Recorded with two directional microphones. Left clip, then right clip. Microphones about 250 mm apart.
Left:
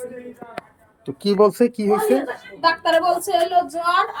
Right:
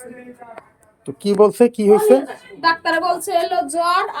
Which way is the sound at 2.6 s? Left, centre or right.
Centre.